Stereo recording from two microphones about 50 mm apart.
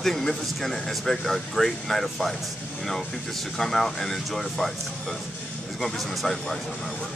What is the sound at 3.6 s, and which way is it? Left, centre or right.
Speech, centre.